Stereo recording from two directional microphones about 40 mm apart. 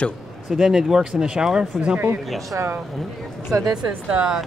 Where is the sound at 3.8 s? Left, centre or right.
Right.